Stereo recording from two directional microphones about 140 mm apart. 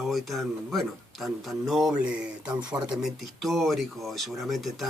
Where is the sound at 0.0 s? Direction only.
Centre (ahead or behind).